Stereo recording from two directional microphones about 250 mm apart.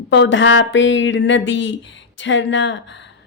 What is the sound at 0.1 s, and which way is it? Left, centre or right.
A woman's voice, left.